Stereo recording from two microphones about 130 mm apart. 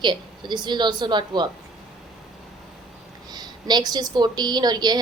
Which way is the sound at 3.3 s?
35° right (ahead or behind).